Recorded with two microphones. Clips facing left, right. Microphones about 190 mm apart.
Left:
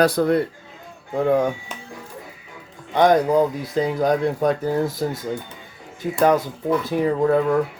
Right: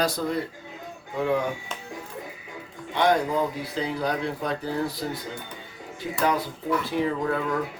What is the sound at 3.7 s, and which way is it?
Speech, 45° left (ahead or behind).